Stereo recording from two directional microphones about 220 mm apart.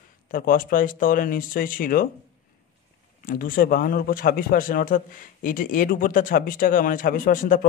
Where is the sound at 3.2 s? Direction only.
40° left (ahead or behind).